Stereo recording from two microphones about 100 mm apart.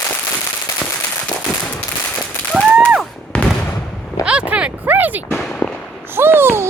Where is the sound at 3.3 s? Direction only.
10° left (ahead or behind).